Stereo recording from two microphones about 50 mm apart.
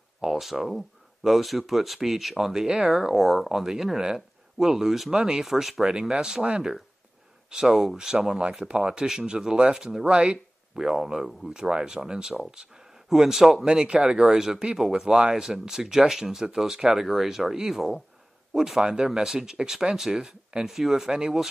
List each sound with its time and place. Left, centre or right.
0.2 s speech: centre
7.6 s speech: centre